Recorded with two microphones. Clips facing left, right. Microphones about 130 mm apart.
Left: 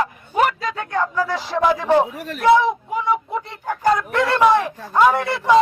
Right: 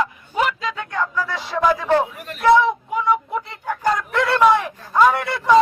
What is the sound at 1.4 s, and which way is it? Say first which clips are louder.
Speech: left 2 dB; centre (ahead or behind).